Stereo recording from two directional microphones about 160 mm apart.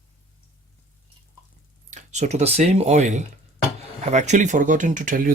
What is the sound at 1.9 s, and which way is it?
Speech, 45° right (ahead or behind).